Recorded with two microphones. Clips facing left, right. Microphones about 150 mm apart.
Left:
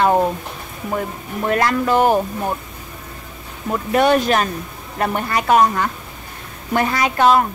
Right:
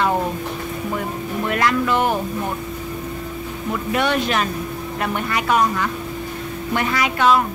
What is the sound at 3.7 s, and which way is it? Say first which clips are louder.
A woman's voice: left 5 dB; 40° left (ahead or behind).